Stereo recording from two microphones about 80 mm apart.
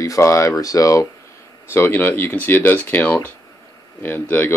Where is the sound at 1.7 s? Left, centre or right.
Left.